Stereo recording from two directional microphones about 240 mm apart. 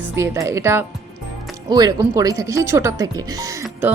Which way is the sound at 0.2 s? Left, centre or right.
Centre.